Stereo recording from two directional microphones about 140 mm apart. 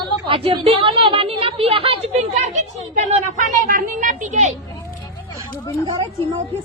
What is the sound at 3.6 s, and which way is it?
Speech, 75° right (ahead or behind).